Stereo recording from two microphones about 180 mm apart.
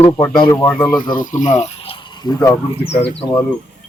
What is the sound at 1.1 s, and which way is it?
Speech, 45° left (ahead or behind).